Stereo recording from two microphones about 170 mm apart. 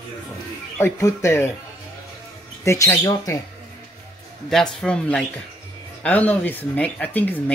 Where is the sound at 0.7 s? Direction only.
15° left (ahead or behind).